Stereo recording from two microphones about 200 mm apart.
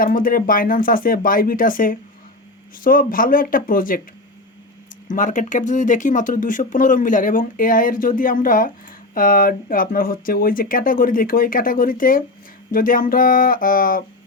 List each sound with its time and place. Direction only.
0.0 s speech: 45° left (ahead or behind)
5.0 s speech: 40° left (ahead or behind)